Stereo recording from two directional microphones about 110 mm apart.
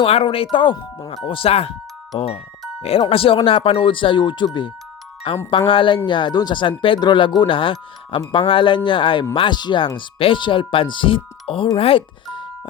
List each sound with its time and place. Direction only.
0.0 s speech: 60° left (ahead or behind)
0.5 s speech: 45° left (ahead or behind)
1.3 s speech: 60° left (ahead or behind)
3.1 s speech: 55° left (ahead or behind)
11.8 s music: 55° left (ahead or behind)